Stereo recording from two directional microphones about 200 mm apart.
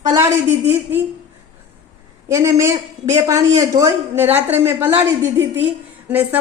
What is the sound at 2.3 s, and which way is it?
A woman's voice, 15° right (ahead or behind).